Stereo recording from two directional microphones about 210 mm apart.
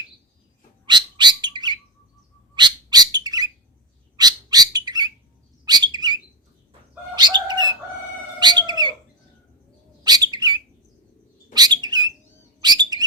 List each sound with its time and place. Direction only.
0.9 s bird: 20° right (ahead or behind)
7.2 s bird: 20° right (ahead or behind)
10.0 s bird: 20° right (ahead or behind)